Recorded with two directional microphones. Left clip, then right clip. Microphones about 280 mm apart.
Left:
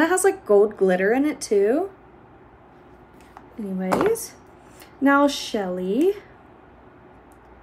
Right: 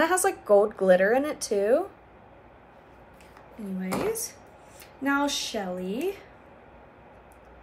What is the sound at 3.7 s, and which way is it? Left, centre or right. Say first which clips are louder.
Speech: left 8 dB; centre.